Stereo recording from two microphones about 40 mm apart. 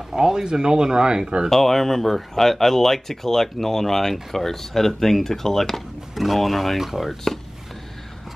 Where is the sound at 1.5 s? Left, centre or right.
Centre.